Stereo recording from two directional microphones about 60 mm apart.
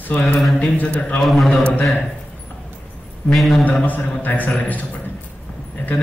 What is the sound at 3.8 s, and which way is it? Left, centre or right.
A man's voice, left.